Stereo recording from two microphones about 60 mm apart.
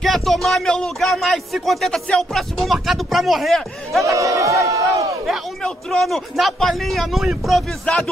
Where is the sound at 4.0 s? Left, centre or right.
Right.